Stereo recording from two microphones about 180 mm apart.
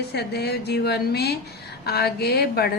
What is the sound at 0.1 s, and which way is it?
A woman's voice, 65° left (ahead or behind).